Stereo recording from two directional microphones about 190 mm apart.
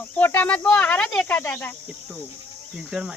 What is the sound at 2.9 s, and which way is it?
Speech, 5° right (ahead or behind).